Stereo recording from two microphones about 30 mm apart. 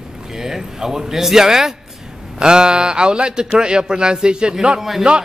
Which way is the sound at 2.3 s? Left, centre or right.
Right.